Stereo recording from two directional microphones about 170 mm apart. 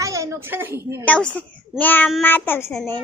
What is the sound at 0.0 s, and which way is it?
A woman's voice, 20° right (ahead or behind).